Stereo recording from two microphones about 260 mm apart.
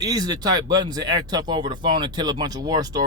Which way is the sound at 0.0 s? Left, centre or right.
Centre.